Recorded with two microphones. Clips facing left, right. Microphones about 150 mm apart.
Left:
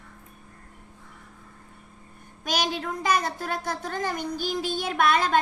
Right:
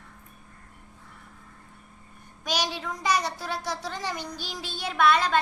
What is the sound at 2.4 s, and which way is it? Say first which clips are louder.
A woman's voice: left 2 dB; 50° left (ahead or behind).